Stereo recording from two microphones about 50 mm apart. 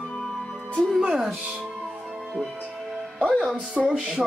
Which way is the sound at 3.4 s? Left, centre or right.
Centre.